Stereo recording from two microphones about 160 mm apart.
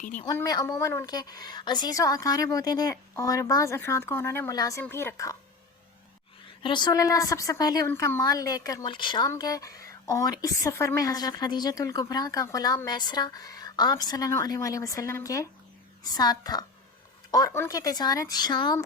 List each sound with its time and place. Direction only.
0.0 s a woman's voice: 50° left (ahead or behind)
0.3 s a woman's voice: 25° left (ahead or behind)
6.6 s a woman's voice: 30° left (ahead or behind)